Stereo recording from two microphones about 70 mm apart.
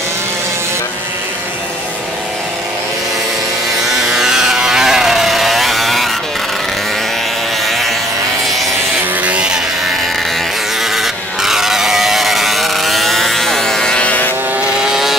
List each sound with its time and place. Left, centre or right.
4.1 s vehicle: centre
7.6 s toothbrush: centre
9.2 s vehicle: centre
11.0 s vehicle: centre; by 14.3 s left
14.9 s vehicle: centre